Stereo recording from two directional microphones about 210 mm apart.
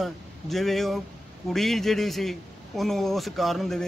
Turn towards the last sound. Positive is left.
turn(degrees=0)  # may be behind; listen again after turning